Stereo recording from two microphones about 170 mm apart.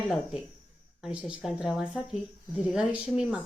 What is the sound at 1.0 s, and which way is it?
A woman's voice, 5° right (ahead or behind).